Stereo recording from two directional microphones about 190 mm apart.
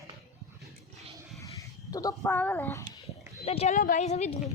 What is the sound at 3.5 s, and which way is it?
Speech, 35° left (ahead or behind).